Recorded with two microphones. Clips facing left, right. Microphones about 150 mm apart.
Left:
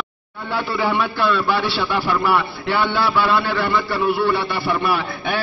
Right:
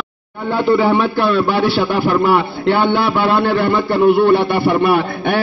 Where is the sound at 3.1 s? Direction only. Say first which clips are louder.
Right 4 dB; 50° right (ahead or behind).